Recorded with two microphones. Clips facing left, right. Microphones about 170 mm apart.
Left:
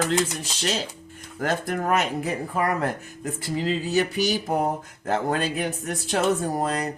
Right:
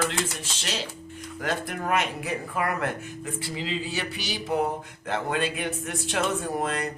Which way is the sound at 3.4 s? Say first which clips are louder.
Left 7 dB; 45° left (ahead or behind).